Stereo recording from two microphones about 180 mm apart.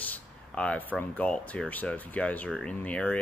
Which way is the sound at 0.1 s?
10° left (ahead or behind).